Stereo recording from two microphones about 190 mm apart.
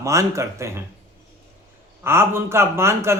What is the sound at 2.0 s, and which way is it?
Speech, 10° right (ahead or behind).